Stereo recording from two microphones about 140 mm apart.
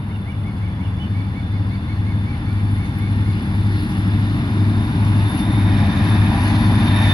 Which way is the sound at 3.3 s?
35° left (ahead or behind).